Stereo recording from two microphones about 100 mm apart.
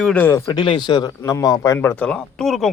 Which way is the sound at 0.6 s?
55° left (ahead or behind).